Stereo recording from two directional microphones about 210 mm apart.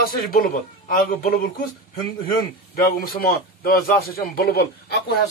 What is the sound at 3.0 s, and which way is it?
Speech, 45° left (ahead or behind).